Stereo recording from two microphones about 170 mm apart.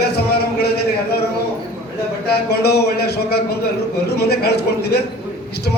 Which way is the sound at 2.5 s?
70° left (ahead or behind).